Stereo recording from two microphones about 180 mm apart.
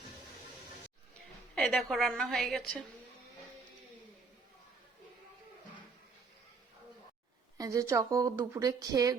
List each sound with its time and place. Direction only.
1.5 s a woman's voice: 5° left (ahead or behind)
7.6 s a woman's voice: 15° right (ahead or behind)